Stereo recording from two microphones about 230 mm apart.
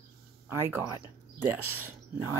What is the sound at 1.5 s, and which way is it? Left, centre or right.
Speech, right.